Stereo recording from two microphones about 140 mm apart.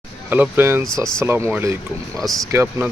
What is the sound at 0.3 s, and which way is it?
Speech, 15° right (ahead or behind).